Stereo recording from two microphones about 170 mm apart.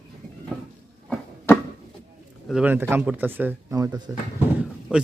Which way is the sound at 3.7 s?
20° right (ahead or behind).